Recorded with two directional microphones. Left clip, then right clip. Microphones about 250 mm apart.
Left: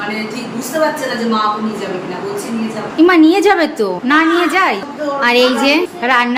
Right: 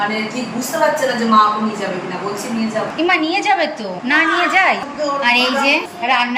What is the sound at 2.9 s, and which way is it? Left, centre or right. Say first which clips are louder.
A woman's voice: left 8 dB; centre.